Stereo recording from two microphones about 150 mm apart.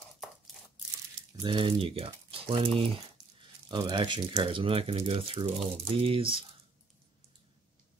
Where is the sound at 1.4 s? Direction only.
35° right (ahead or behind).